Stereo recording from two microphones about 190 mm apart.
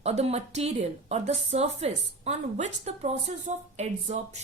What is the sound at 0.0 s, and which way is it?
A woman's voice, 35° right (ahead or behind).